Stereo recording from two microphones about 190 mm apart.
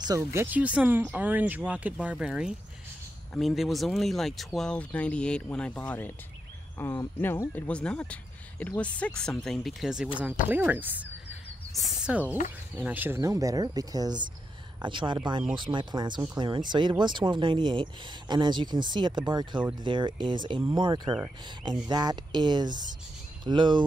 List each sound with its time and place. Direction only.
0.0 s speech: 15° right (ahead or behind)